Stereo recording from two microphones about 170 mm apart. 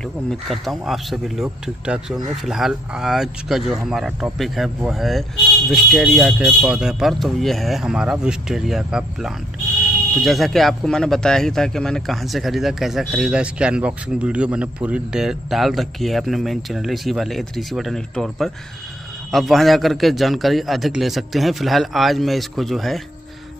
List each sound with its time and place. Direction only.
0.3 s speech: centre (ahead or behind)